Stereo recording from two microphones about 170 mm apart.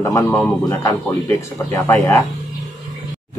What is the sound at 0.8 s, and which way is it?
Speech, 20° left (ahead or behind).